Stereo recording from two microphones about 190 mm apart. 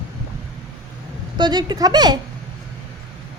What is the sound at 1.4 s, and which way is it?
Speech, 20° right (ahead or behind).